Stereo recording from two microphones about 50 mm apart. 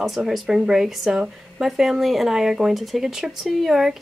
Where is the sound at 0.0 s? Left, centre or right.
Centre.